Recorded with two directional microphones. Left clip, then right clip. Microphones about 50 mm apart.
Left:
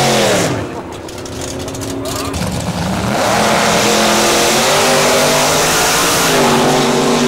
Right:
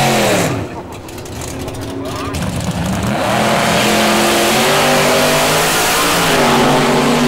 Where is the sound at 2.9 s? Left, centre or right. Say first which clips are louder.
Left 2 dB; left.